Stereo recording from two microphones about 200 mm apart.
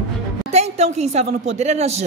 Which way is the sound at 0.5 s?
35° right (ahead or behind).